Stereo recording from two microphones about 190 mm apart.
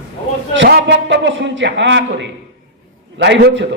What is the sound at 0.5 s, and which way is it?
A man's voice, 70° right (ahead or behind).